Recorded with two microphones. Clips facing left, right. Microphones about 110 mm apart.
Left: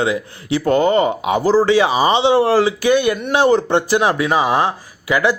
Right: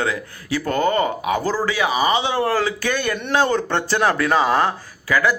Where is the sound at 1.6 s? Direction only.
30° left (ahead or behind).